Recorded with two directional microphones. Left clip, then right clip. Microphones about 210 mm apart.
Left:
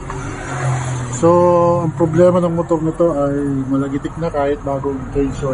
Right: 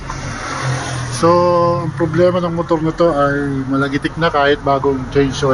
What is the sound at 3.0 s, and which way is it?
Speech, 10° right (ahead or behind).